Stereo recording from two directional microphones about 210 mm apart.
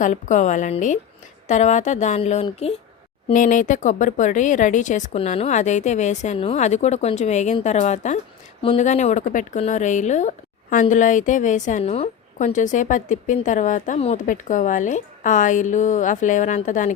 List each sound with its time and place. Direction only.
0.0 s speech: 35° left (ahead or behind)